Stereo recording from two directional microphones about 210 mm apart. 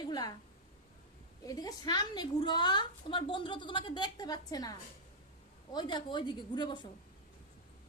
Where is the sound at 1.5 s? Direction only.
20° left (ahead or behind).